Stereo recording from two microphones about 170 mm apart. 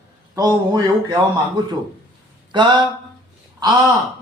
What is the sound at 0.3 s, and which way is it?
Speech, 20° right (ahead or behind).